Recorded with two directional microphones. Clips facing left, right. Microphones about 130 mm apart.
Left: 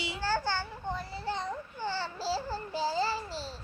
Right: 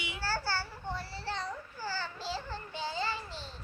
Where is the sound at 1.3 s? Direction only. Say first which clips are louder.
Left 3 dB; 25° left (ahead or behind).